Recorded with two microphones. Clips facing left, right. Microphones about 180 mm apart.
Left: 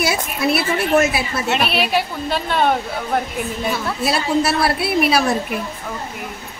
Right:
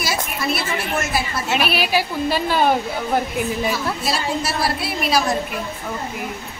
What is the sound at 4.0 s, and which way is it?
A woman's voice, 60° left (ahead or behind).